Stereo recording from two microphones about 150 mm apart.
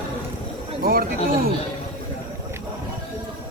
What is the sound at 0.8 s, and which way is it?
Speech, 90° right.